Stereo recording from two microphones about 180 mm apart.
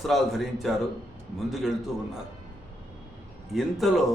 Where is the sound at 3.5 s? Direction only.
Centre (ahead or behind).